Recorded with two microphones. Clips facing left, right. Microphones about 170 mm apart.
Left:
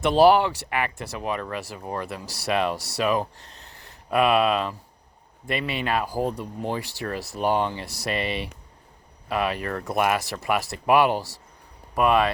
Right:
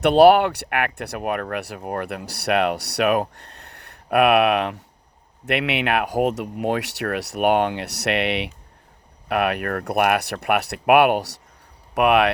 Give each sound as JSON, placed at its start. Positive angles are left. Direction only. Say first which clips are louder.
{"t": 0.0, "sound": "speech", "louder": "right 4 dB", "side_deg": -65}